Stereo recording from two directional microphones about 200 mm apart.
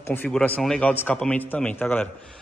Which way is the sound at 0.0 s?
10° left (ahead or behind).